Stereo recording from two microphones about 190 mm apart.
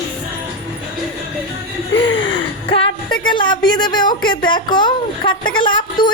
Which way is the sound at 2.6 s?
30° left (ahead or behind).